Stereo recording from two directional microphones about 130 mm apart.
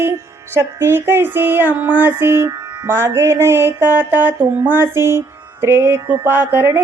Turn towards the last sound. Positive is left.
turn(degrees=-15)  # may be behind; listen again after turning